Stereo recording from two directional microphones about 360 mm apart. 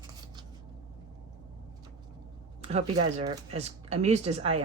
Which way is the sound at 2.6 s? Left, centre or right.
Centre.